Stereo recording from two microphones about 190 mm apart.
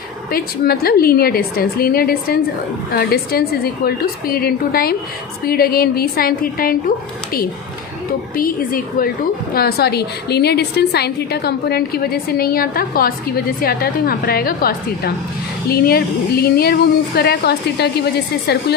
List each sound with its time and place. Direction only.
0.3 s a woman's voice: 50° left (ahead or behind)
8.4 s a woman's voice: 50° left (ahead or behind)